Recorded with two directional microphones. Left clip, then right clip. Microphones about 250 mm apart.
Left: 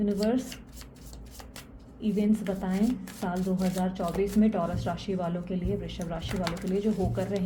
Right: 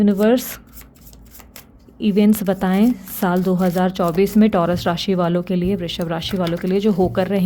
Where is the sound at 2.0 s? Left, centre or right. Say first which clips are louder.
Right 12 dB; right.